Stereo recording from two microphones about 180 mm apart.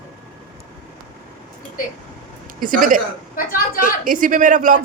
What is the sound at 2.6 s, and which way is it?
Speech, 50° right (ahead or behind).